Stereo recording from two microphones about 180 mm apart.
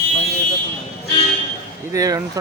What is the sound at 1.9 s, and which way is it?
Speech, 20° right (ahead or behind).